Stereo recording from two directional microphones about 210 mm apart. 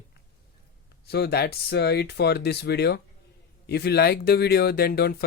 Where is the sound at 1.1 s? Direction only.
50° left (ahead or behind).